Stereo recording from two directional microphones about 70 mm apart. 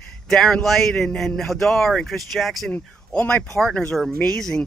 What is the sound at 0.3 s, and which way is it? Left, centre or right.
Speech, centre.